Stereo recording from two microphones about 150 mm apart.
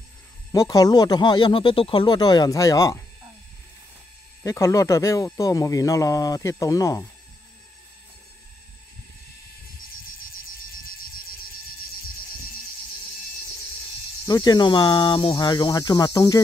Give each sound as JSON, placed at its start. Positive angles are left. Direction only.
{"t": 0.5, "sound": "speech", "side_deg": 25}
{"t": 4.4, "sound": "speech", "side_deg": 20}
{"t": 14.2, "sound": "speech", "side_deg": 25}